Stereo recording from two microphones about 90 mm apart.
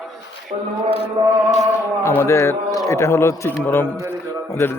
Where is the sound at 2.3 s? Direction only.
35° left (ahead or behind).